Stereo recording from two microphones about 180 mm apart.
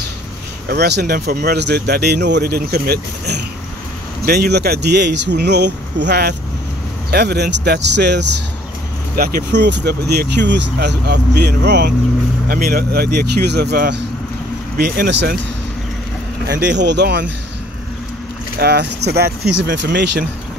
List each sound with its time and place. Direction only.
0.7 s speech: 65° right (ahead or behind)
12.4 s speech: 55° right (ahead or behind)
16.4 s speech: 70° right (ahead or behind)
18.6 s speech: 65° right (ahead or behind)